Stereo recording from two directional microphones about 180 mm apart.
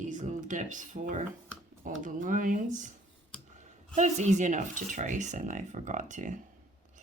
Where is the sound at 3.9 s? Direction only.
40° right (ahead or behind).